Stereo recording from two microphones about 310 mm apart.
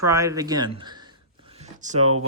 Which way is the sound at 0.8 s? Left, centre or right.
Centre.